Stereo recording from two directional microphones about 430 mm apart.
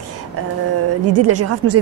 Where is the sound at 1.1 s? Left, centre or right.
Right.